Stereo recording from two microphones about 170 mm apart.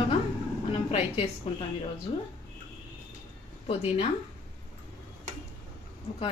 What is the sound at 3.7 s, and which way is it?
Speech, 35° left (ahead or behind).